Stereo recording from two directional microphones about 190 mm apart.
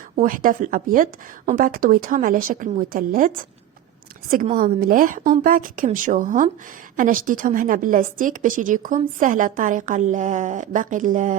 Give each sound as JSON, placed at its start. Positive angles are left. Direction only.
{"t": 0.2, "sound": "a woman's voice", "side_deg": -45}
{"t": 4.5, "sound": "a woman's voice", "side_deg": -50}